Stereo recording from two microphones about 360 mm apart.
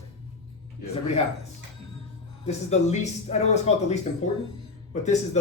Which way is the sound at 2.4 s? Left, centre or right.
Centre.